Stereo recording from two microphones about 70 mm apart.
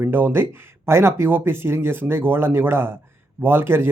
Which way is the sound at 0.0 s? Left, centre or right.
Right.